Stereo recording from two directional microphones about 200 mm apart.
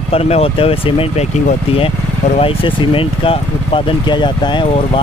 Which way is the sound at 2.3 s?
25° left (ahead or behind).